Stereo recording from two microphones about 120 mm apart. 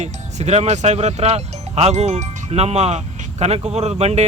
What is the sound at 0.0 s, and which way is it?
Speech, 70° right (ahead or behind).